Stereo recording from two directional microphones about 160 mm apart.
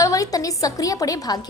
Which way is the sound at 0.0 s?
20° left (ahead or behind).